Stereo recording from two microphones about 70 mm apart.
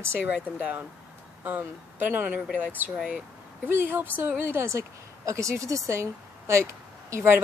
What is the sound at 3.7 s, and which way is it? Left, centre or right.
Speech, right.